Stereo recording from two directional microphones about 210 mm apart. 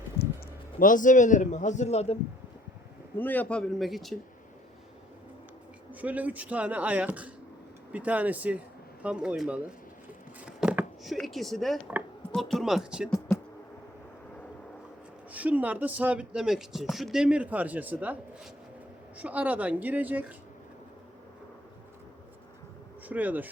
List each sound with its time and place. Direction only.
0.2 s a sound: 50° left (ahead or behind)
0.8 s a man's voice: 40° left (ahead or behind)
3.2 s a man's voice: 10° left (ahead or behind)
5.9 s a man's voice: 5° right (ahead or behind)
13.3 s a sound: 15° left (ahead or behind)
15.3 s speech: 5° right (ahead or behind)
23.0 s speech: 10° right (ahead or behind)